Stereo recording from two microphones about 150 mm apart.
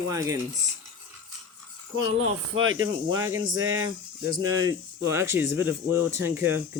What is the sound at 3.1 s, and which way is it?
Speech, 20° right (ahead or behind).